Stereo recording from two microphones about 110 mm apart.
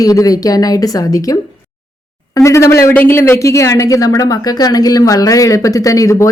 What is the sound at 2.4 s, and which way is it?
Speech, 25° left (ahead or behind).